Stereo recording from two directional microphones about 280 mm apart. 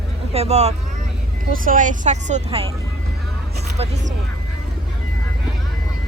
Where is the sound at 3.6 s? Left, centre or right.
Right.